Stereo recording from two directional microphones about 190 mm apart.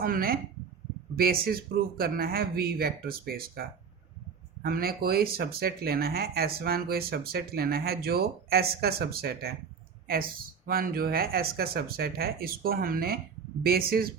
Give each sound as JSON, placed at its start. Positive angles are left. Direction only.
{"t": 0.0, "sound": "speech", "side_deg": -50}